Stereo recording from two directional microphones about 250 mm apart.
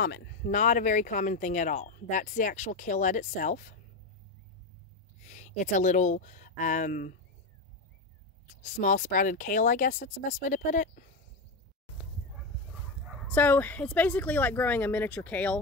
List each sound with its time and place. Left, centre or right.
0.0 s speech: left
5.2 s speech: left
8.7 s speech: left
13.3 s speech: centre